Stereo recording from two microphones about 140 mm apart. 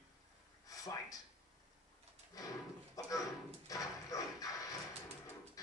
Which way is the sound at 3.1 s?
25° left (ahead or behind).